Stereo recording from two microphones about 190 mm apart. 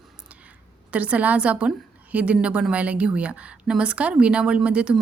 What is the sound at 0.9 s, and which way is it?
A woman's voice, 5° right (ahead or behind).